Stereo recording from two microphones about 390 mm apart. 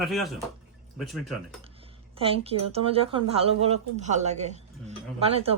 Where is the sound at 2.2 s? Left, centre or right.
Centre.